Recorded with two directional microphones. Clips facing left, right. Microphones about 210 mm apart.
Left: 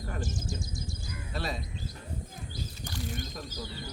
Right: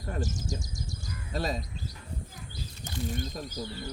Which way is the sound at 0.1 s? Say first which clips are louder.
Right 4 dB; 40° right (ahead or behind).